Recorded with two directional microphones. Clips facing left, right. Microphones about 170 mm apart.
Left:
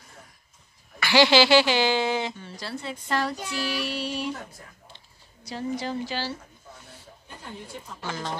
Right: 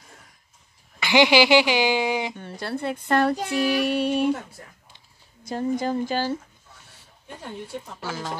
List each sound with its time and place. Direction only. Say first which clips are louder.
0.9 s speech: right 1 dB; 20° right (ahead or behind)
2.3 s speech: right 5 dB; 55° right (ahead or behind)
5.4 s speech: right 5 dB; 50° right (ahead or behind)
8.0 s speech: even; 5° right (ahead or behind)